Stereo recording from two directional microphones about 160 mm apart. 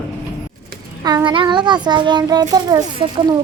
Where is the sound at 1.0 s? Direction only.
25° right (ahead or behind).